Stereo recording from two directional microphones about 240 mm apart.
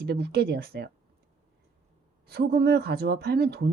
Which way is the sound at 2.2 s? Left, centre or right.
Right.